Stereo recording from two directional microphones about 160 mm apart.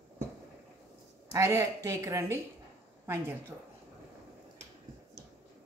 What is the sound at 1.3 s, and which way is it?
A woman's voice, 20° right (ahead or behind).